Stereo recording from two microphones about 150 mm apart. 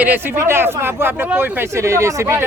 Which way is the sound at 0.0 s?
15° right (ahead or behind).